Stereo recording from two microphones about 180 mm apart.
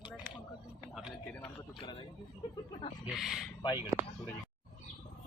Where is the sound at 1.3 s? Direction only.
10° left (ahead or behind).